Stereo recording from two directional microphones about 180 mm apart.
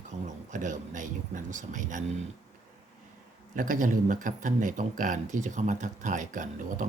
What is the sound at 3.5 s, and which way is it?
Speech, 50° right (ahead or behind).